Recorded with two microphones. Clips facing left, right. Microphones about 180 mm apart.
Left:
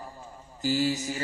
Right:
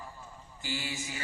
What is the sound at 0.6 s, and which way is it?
Mantra, 40° left (ahead or behind).